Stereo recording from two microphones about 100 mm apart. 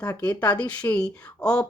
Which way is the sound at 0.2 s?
15° left (ahead or behind).